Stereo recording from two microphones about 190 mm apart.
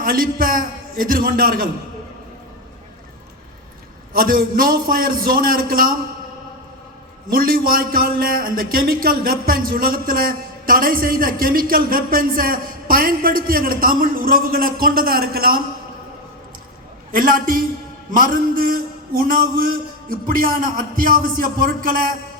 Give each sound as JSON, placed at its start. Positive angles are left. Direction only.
{"t": 0.0, "sound": "a man's voice", "side_deg": -50}
{"t": 4.1, "sound": "a man's voice", "side_deg": -50}
{"t": 7.3, "sound": "a man's voice", "side_deg": -50}
{"t": 17.1, "sound": "a man's voice", "side_deg": -50}